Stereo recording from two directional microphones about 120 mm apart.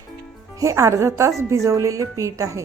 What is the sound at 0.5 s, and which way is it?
A woman's voice, 25° right (ahead or behind).